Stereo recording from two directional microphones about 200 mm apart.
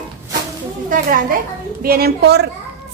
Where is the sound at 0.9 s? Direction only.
45° right (ahead or behind).